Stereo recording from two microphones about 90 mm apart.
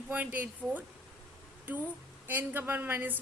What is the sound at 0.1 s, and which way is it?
A woman's voice, 20° right (ahead or behind).